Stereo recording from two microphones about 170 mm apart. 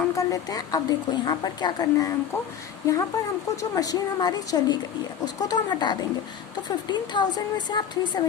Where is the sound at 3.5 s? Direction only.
20° left (ahead or behind).